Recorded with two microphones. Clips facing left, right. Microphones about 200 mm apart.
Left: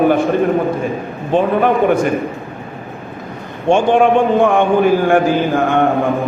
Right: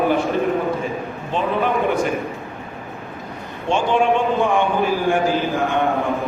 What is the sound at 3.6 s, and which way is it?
A man's voice, 50° left (ahead or behind).